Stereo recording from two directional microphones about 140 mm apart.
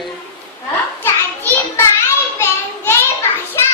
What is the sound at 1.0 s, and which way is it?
Children playing, 15° left (ahead or behind).